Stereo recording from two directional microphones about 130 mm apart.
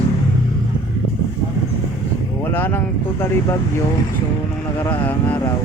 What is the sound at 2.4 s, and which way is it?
Speech, 15° left (ahead or behind).